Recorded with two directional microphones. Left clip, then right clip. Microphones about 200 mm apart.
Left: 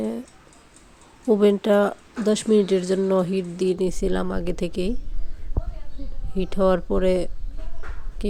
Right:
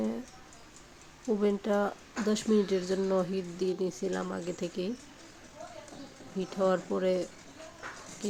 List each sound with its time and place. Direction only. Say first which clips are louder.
1.3 s speech: left 11 dB; 45° left (ahead or behind)
6.4 s speech: left 8 dB; 35° left (ahead or behind)